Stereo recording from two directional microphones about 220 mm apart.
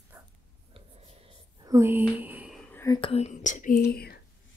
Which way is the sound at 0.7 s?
25° right (ahead or behind).